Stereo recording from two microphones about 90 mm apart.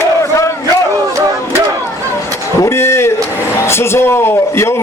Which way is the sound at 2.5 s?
30° left (ahead or behind).